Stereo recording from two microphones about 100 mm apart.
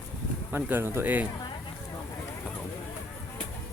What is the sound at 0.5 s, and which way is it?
Speech, 25° right (ahead or behind).